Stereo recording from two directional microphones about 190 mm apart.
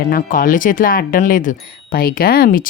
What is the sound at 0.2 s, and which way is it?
Speech, 45° left (ahead or behind).